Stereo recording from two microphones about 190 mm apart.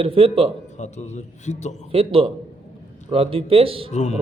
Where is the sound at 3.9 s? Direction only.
40° left (ahead or behind).